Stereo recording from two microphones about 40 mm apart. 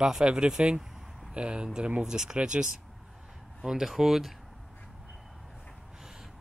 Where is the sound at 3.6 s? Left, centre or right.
Centre.